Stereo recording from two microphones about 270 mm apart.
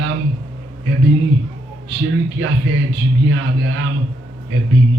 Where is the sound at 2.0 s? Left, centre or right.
Right.